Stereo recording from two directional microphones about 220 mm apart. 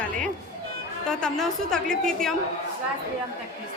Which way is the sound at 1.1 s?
5° left (ahead or behind).